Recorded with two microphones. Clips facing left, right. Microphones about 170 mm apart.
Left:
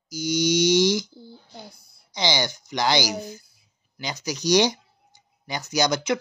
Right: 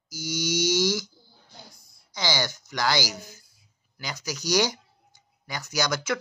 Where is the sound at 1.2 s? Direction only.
65° left (ahead or behind).